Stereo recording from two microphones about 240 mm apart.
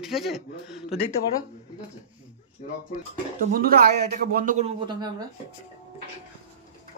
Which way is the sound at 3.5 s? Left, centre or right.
Right.